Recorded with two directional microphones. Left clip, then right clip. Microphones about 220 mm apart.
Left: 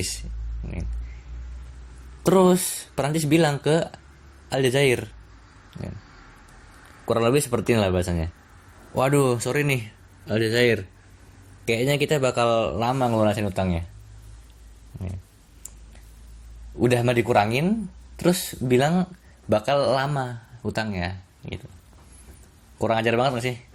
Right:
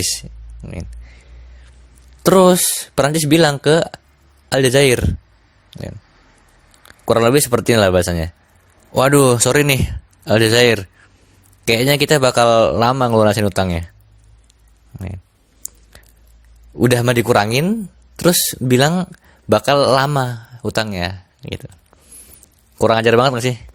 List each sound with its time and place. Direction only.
0.0 s speech: 45° right (ahead or behind)
2.2 s speech: 50° right (ahead or behind)
7.0 s speech: 50° right (ahead or behind)
16.7 s speech: 50° right (ahead or behind)
22.8 s speech: 50° right (ahead or behind)